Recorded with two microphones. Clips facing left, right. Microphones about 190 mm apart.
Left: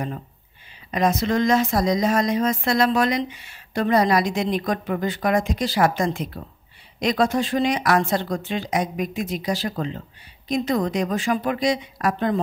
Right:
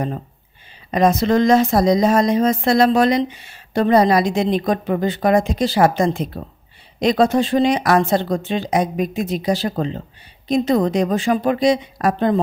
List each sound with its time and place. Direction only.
0.9 s speech: 35° right (ahead or behind)